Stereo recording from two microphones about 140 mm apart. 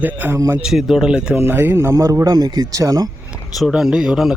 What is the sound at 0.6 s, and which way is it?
Speech, 5° right (ahead or behind).